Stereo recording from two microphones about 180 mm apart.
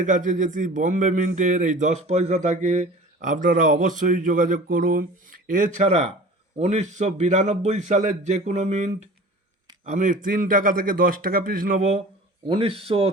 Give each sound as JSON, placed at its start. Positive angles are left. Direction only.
{"t": 0.0, "sound": "a man's voice", "side_deg": -45}